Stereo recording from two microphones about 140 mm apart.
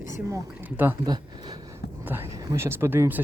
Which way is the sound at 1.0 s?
30° right (ahead or behind).